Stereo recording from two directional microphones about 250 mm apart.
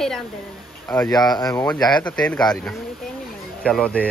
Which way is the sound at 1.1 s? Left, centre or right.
Centre.